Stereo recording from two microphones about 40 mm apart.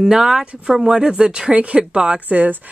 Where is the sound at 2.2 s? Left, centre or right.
Right.